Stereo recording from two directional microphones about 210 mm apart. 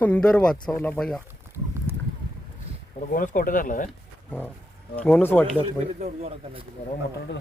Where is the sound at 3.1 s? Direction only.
40° left (ahead or behind).